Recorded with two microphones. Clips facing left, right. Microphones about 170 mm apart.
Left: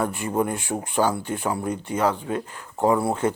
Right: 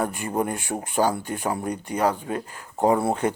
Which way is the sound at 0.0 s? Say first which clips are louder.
Left 1 dB; 45° right (ahead or behind).